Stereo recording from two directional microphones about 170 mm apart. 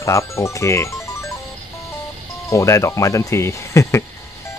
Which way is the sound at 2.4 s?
15° left (ahead or behind).